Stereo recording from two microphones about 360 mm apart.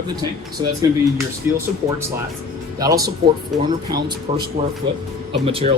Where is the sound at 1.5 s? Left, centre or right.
Centre.